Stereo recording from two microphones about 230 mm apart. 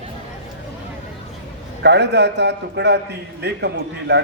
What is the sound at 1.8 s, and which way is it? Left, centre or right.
A man's voice, right.